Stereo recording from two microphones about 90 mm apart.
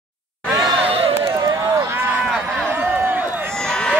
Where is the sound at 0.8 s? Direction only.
90° right.